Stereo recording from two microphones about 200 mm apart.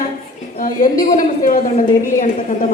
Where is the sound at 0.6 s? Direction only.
45° left (ahead or behind).